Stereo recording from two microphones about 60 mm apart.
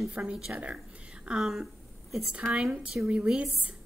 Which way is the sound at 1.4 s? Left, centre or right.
Centre.